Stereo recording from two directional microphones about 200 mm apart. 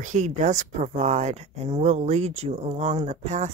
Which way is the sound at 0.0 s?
40° right (ahead or behind).